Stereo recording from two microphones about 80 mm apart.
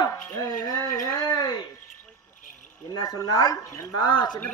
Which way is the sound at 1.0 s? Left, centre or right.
Left.